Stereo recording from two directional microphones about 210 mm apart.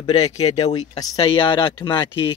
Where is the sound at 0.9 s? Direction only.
20° left (ahead or behind).